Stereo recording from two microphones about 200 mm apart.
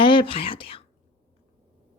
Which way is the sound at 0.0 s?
25° left (ahead or behind).